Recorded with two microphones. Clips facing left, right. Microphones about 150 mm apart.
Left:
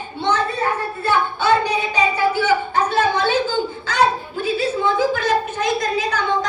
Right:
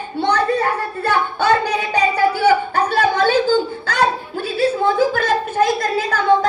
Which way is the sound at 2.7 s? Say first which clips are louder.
Right 1 dB; 55° right (ahead or behind).